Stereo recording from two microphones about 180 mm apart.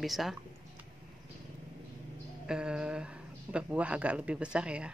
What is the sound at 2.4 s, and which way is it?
Speech, 5° right (ahead or behind).